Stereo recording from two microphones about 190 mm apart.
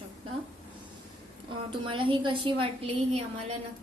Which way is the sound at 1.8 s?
25° right (ahead or behind).